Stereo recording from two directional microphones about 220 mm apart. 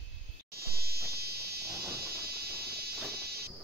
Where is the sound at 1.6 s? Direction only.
15° right (ahead or behind).